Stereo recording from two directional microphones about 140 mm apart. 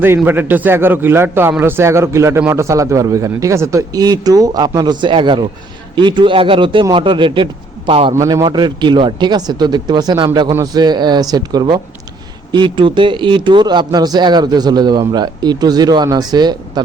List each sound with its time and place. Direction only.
0.3 s a man's voice: 15° right (ahead or behind); by 8.1 s 40° right (ahead or behind)
8.1 s a man's voice: 20° right (ahead or behind)
8.4 s a man's voice: 30° right (ahead or behind)